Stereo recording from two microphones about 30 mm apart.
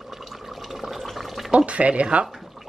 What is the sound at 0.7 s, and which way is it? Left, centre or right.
Water, centre.